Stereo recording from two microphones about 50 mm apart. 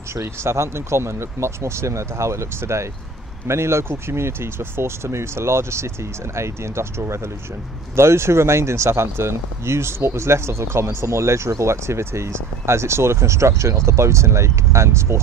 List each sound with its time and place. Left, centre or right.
0.1 s speech: right